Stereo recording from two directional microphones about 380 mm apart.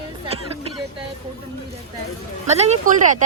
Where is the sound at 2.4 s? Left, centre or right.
Centre.